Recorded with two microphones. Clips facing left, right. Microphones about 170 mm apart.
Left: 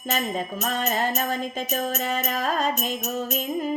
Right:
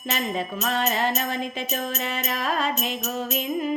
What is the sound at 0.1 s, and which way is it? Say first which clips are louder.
Music: left 1 dB; 45° left (ahead or behind).